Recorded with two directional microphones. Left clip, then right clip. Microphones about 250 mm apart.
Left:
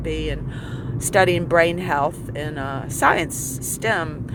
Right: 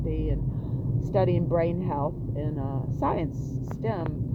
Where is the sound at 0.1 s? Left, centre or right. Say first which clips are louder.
Left 8 dB; centre.